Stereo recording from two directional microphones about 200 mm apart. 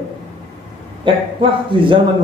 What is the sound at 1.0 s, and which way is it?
Speech, 25° right (ahead or behind).